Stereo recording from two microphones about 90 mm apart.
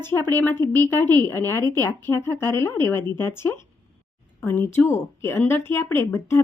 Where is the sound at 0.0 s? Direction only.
25° left (ahead or behind).